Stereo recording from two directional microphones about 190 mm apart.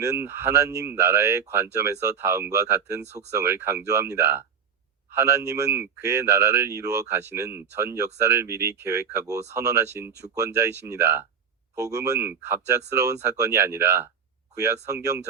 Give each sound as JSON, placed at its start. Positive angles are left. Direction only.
{"t": 0.0, "sound": "speech", "side_deg": -15}